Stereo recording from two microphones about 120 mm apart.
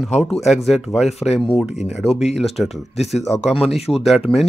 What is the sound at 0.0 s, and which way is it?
Speech, 5° left (ahead or behind).